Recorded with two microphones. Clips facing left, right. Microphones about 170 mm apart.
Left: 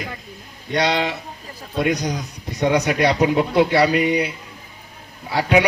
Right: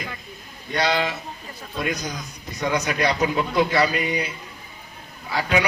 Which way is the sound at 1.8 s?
65° left (ahead or behind).